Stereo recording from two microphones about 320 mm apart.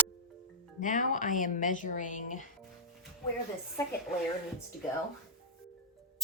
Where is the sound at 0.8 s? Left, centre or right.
Left.